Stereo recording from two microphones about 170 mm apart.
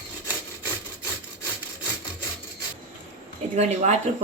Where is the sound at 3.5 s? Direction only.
40° right (ahead or behind).